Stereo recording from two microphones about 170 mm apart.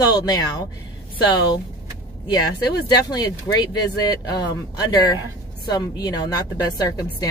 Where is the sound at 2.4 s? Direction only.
25° left (ahead or behind).